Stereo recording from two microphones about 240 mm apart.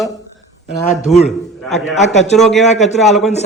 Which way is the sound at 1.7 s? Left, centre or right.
Left.